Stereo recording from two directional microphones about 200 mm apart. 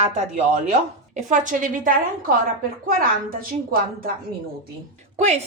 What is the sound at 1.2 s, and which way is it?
A woman's voice, 40° right (ahead or behind).